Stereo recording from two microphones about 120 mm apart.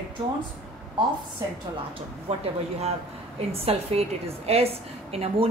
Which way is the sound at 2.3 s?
65° right (ahead or behind).